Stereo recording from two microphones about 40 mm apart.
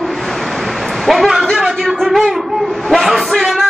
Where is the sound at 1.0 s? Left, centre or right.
Centre.